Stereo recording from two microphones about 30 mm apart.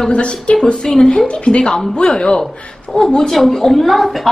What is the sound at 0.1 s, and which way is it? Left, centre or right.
A woman's voice, left.